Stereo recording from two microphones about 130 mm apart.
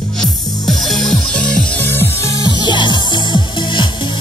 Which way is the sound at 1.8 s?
15° left (ahead or behind).